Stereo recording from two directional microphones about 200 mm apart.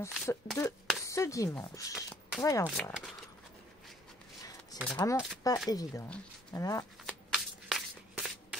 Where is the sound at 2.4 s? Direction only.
15° left (ahead or behind).